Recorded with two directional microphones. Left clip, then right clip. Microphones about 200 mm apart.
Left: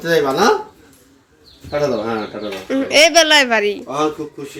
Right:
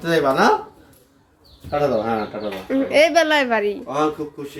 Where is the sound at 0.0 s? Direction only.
5° right (ahead or behind).